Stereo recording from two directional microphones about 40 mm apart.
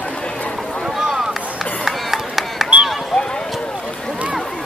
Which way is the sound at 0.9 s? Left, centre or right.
Centre.